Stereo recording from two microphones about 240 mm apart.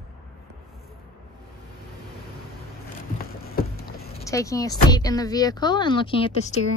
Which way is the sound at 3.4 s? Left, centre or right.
Left.